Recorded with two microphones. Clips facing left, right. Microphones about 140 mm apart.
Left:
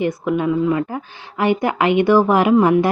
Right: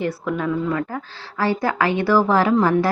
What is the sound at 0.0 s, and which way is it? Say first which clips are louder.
A woman's voice: left 4 dB; 20° left (ahead or behind).